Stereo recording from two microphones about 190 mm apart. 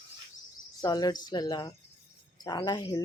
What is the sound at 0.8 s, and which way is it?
Speech, 20° left (ahead or behind).